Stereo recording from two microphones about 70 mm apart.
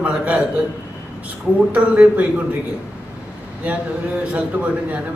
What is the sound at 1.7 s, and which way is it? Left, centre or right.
Speech, right.